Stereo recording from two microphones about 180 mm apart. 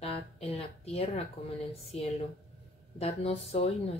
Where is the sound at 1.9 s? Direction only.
35° left (ahead or behind).